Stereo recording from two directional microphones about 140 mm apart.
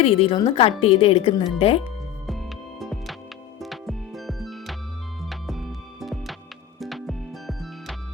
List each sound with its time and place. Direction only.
0.0 s a woman's voice: 45° left (ahead or behind)
2.2 s music: centre (ahead or behind)